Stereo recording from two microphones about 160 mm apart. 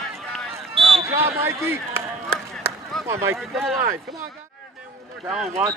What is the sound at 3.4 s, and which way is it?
Speech, centre (ahead or behind).